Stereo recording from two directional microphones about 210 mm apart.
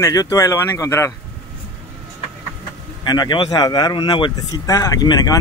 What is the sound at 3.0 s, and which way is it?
Speech, 20° left (ahead or behind).